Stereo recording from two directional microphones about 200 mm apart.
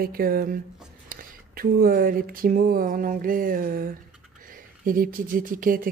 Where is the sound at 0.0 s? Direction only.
50° right (ahead or behind).